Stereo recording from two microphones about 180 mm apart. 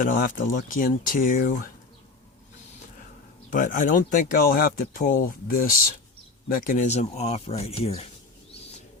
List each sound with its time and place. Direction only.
0.0 s speech: 50° left (ahead or behind)
3.5 s speech: 45° left (ahead or behind)
6.7 s speech: 40° left (ahead or behind)